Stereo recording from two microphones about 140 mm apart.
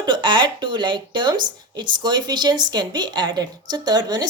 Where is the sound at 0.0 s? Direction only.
35° right (ahead or behind).